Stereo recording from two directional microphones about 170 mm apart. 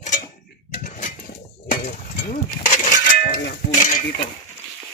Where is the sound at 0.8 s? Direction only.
50° left (ahead or behind).